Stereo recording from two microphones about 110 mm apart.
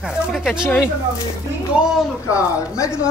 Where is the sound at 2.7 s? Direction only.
30° left (ahead or behind).